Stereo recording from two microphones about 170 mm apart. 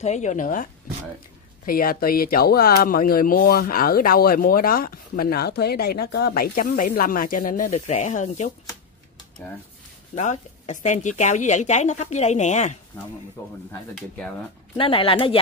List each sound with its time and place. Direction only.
0.0 s a woman's voice: 45° left (ahead or behind)
1.7 s speech: 60° left (ahead or behind)
10.1 s a woman's voice: 45° left (ahead or behind)
13.4 s speech: 15° left (ahead or behind)
13.9 s speech: 5° left (ahead or behind)
14.8 s speech: 30° left (ahead or behind)